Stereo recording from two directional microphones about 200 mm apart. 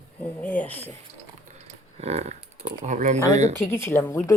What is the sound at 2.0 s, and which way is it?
Speech, 30° right (ahead or behind).